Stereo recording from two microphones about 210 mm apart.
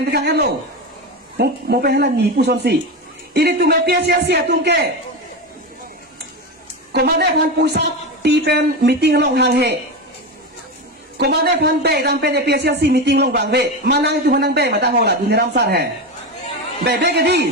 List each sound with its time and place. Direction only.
0.1 s a woman's voice: 50° right (ahead or behind)
6.9 s a woman's voice: 50° right (ahead or behind)
11.2 s a woman's voice: 50° right (ahead or behind)